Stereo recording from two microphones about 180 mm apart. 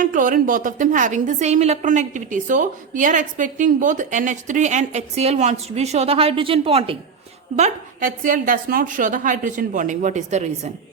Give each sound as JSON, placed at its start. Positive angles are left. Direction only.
{"t": 0.0, "sound": "a woman's voice", "side_deg": -45}
{"t": 7.5, "sound": "a woman's voice", "side_deg": -45}